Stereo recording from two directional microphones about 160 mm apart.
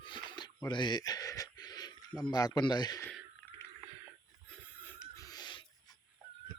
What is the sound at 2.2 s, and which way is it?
Speech, 25° left (ahead or behind).